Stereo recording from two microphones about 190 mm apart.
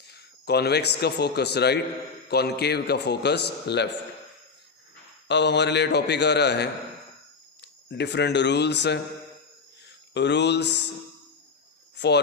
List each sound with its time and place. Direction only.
0.1 s a man's voice: 60° left (ahead or behind)
5.3 s a man's voice: 65° left (ahead or behind)
10.2 s a man's voice: 65° left (ahead or behind)
11.9 s speech: 65° left (ahead or behind)